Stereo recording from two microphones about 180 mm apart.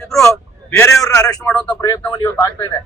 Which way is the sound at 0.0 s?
Centre (ahead or behind).